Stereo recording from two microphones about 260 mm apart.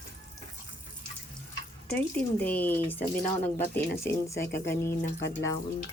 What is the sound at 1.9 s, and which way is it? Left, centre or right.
Speech, centre.